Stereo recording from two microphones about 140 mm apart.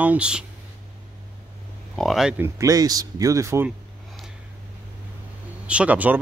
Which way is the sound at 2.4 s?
20° right (ahead or behind).